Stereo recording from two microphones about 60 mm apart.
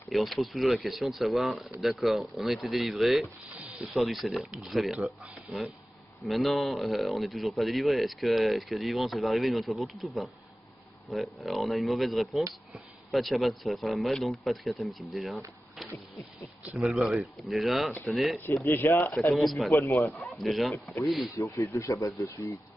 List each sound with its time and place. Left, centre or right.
0.1 s speech: centre
3.4 s snake: right
3.8 s speech: centre
15.8 s a sound: centre
16.7 s speech: centre
18.7 s speech: left
19.3 s speech: centre
19.7 s speech: left
20.3 s speech: centre
21.4 s speech: left